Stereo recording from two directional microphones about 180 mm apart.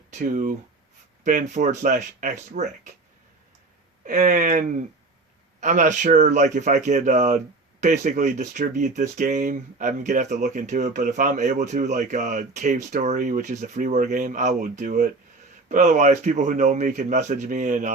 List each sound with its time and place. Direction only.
0.1 s speech: 45° right (ahead or behind)
4.0 s speech: 45° right (ahead or behind)